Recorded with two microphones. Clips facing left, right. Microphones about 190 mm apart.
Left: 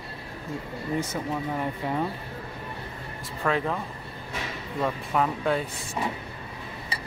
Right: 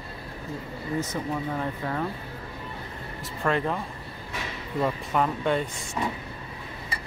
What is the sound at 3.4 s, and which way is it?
Speech, centre (ahead or behind).